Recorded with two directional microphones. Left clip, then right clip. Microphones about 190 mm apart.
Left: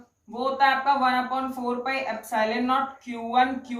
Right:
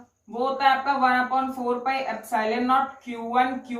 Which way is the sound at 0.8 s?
20° left (ahead or behind).